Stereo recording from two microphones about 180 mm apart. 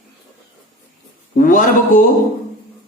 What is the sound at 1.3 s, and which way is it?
Speech, 45° left (ahead or behind).